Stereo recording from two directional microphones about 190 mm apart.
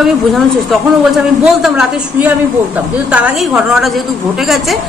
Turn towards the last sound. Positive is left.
turn(degrees=0)  # may be behind; listen again after turning